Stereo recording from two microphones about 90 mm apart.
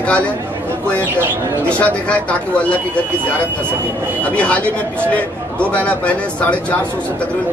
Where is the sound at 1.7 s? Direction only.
15° left (ahead or behind).